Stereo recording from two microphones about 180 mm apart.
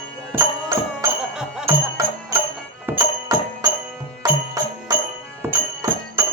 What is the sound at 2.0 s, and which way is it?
Music, 20° right (ahead or behind).